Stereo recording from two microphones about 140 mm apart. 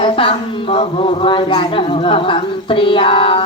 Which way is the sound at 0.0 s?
40° left (ahead or behind).